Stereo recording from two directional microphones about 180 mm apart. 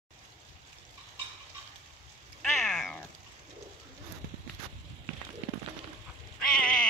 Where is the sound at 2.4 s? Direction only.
5° left (ahead or behind).